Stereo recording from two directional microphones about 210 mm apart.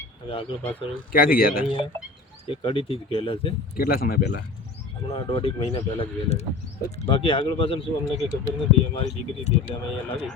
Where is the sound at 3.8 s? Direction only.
45° left (ahead or behind).